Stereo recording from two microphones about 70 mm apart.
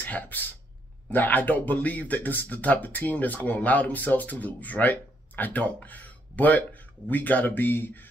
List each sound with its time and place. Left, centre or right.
0.0 s speech: left